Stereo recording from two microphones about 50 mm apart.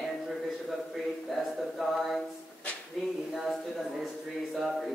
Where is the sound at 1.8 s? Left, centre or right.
Centre.